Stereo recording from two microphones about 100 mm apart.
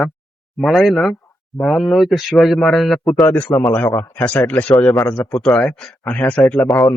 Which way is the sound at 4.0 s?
10° left (ahead or behind).